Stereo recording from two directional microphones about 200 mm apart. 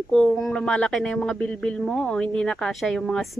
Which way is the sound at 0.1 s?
5° left (ahead or behind).